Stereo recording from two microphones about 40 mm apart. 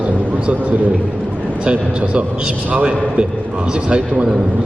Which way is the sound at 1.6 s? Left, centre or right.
Right.